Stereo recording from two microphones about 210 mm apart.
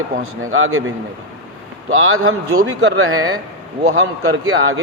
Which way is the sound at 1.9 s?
75° right (ahead or behind).